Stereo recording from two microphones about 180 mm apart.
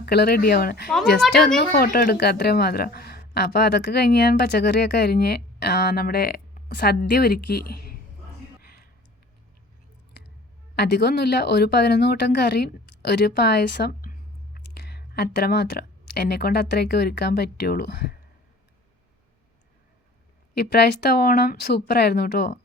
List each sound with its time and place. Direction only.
0.0 s a woman's voice: 65° left (ahead or behind)
1.2 s speech: centre (ahead or behind)
1.5 s a woman's voice: 55° left (ahead or behind)
8.6 s a sound: 55° left (ahead or behind)
10.8 s a woman's voice: 65° left (ahead or behind)
20.6 s a woman's voice: 65° left (ahead or behind)